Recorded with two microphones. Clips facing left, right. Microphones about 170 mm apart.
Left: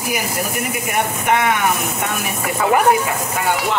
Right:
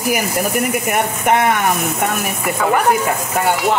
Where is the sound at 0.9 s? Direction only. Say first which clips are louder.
Even; 45° right (ahead or behind).